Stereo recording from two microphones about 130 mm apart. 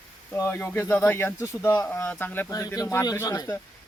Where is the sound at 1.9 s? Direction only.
15° left (ahead or behind).